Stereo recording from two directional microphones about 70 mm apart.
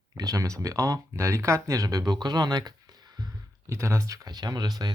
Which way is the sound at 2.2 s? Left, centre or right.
Right.